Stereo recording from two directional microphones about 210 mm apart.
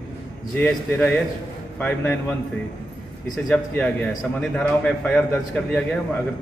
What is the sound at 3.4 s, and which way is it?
A man's voice, 5° left (ahead or behind).